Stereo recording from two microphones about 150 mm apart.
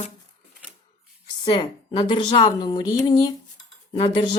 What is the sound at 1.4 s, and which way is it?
A woman's voice, 30° left (ahead or behind).